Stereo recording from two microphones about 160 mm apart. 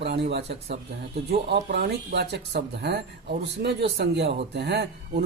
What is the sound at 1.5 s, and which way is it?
Speech, 90° right.